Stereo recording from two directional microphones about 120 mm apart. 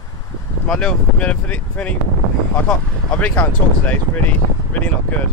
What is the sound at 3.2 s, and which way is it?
Speech, 15° left (ahead or behind).